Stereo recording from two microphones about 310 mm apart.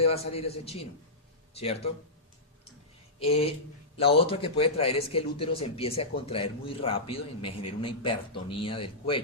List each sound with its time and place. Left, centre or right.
0.0 s a man's voice: centre
3.2 s a man's voice: centre